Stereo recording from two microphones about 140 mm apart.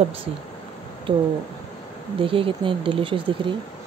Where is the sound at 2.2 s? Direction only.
40° right (ahead or behind).